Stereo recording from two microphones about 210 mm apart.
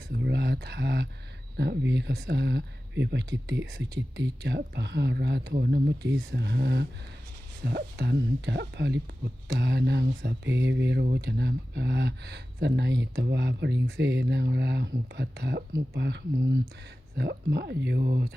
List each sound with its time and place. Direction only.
0.1 s speech: 55° right (ahead or behind)